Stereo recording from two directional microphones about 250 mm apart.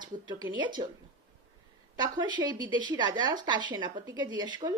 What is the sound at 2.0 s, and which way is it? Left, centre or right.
Speech, centre.